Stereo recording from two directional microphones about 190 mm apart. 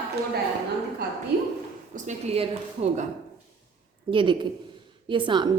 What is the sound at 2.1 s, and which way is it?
Speech, 30° right (ahead or behind).